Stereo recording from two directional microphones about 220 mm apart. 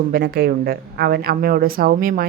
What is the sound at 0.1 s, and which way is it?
A woman's voice, 45° right (ahead or behind).